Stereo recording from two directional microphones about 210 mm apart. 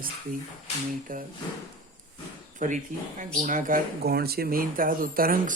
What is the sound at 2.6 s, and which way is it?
Speech, 40° right (ahead or behind).